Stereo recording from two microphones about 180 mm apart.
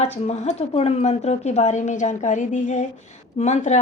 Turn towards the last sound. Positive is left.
turn(degrees=40)  # may be behind; listen again after turning